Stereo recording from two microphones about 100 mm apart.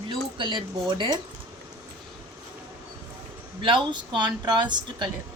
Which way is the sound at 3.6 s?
50° right (ahead or behind).